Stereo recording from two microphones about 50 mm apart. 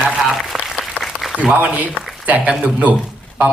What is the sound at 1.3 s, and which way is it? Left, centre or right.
A man's voice, right.